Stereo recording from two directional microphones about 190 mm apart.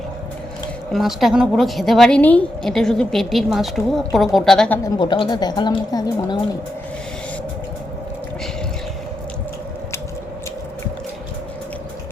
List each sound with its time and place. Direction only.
0.9 s a woman's voice: centre (ahead or behind)
4.8 s a woman's voice: 25° left (ahead or behind)